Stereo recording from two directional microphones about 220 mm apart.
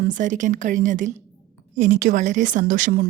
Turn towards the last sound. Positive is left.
turn(degrees=-40)  # may be behind; listen again after turning